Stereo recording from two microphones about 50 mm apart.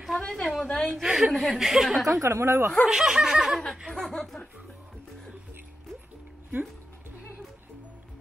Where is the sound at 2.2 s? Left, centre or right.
Right.